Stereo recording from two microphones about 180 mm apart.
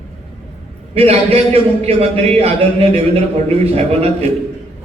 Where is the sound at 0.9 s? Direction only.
35° right (ahead or behind).